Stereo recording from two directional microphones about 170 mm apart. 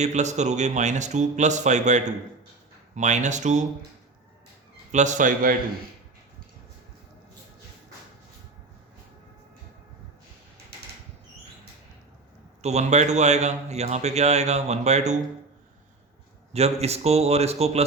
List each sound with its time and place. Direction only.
0.0 s speech: 45° right (ahead or behind)
4.9 s speech: 45° right (ahead or behind)
12.6 s a man's voice: 40° right (ahead or behind)
16.5 s a man's voice: 40° right (ahead or behind)